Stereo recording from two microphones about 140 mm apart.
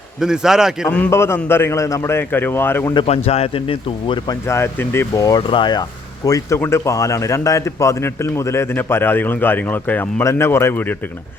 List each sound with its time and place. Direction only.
0.2 s a man's voice: 5° right (ahead or behind)
0.9 s speech: 10° left (ahead or behind)
2.9 s speech: 40° left (ahead or behind)
4.4 s speech: 15° left (ahead or behind)
5.4 s speech: 35° left (ahead or behind); by 10.9 s 15° left (ahead or behind)